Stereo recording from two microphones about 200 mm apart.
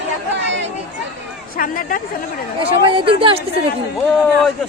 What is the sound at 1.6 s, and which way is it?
Speech, 45° left (ahead or behind).